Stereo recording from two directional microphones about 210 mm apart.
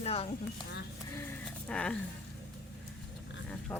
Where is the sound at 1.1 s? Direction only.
10° left (ahead or behind).